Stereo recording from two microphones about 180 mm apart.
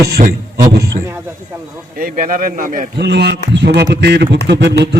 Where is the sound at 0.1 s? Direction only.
60° right (ahead or behind).